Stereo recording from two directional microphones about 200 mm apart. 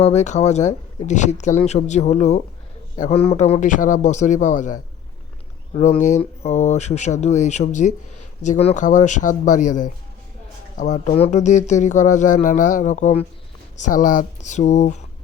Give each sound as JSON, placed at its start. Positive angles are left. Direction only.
{"t": 0.0, "sound": "speech", "side_deg": 35}